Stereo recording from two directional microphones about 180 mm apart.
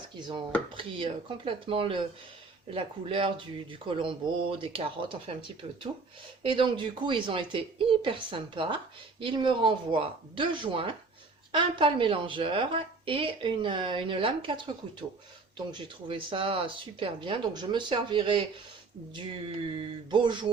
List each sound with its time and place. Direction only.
0.2 s speech: 25° right (ahead or behind)
19.7 s speech: 25° right (ahead or behind)